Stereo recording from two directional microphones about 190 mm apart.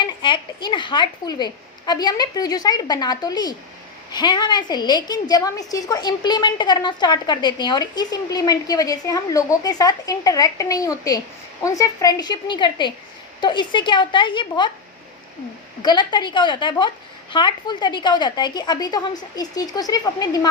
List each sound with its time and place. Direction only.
0.0 s a woman's voice: 25° left (ahead or behind)
15.8 s a woman's voice: 25° left (ahead or behind)